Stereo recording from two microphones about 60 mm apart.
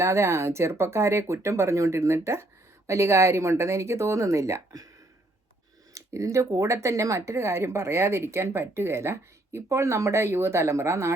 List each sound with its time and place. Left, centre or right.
0.0 s speech: right
5.9 s speech: right